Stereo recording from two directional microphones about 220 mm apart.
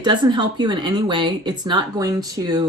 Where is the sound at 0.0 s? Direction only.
20° right (ahead or behind).